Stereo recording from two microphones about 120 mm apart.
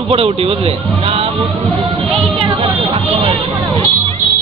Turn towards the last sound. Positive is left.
turn(degrees=-55)  # may be behind; listen again after turning